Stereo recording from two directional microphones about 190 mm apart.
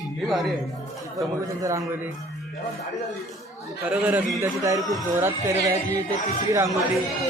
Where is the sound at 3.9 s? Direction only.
10° right (ahead or behind).